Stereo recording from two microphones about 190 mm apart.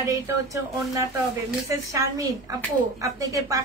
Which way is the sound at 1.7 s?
15° right (ahead or behind).